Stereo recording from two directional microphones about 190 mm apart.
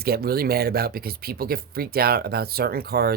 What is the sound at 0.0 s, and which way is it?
Speech, 55° right (ahead or behind).